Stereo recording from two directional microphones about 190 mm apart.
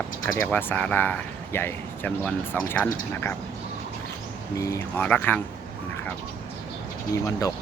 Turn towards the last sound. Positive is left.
turn(degrees=20)  # may be behind; listen again after turning